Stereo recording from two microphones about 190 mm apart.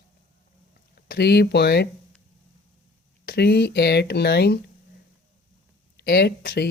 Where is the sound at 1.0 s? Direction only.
60° left (ahead or behind).